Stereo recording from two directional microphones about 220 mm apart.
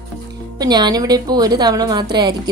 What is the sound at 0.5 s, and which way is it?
A woman's voice, 20° right (ahead or behind).